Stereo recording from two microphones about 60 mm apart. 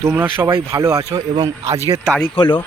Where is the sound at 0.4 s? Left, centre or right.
Right.